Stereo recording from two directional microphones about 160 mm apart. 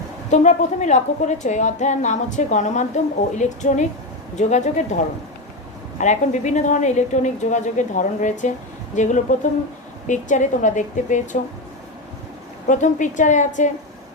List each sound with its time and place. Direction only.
0.3 s a woman's voice: 45° left (ahead or behind)
6.0 s a woman's voice: 45° left (ahead or behind)
12.6 s a woman's voice: 55° left (ahead or behind)